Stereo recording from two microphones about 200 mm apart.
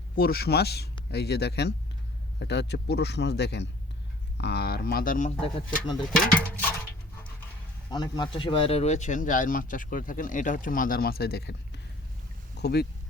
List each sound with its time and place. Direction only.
0.2 s speech: 50° left (ahead or behind)
6.0 s speech: 5° left (ahead or behind)
7.9 s speech: 20° left (ahead or behind); by 12.9 s 55° left (ahead or behind)